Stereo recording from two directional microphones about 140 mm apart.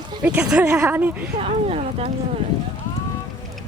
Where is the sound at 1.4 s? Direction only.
45° right (ahead or behind).